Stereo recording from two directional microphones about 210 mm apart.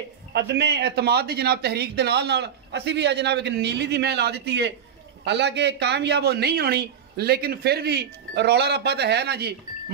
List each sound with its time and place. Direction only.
0.3 s speech: 55° right (ahead or behind)